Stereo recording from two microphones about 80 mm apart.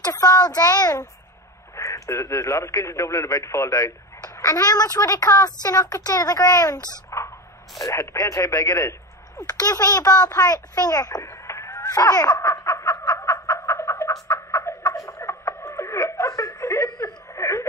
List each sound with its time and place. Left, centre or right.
0.0 s speech: left
1.8 s a woman's voice: left
7.8 s a woman's voice: left
11.2 s a sound: left
11.8 s laughter: left
12.4 s a sound: left
14.9 s snicker: left
17.0 s whimper: left